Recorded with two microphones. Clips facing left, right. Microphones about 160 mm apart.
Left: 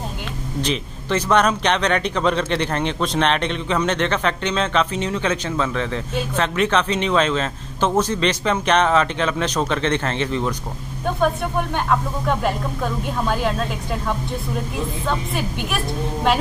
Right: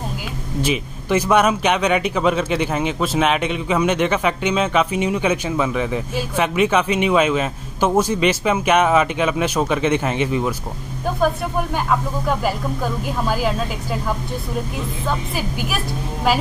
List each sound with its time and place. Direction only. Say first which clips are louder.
0.6 s speech: right 3 dB; 10° right (ahead or behind)